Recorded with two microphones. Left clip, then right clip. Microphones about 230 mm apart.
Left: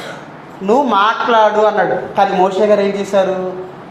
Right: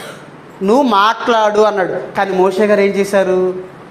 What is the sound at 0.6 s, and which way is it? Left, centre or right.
A man's voice, right.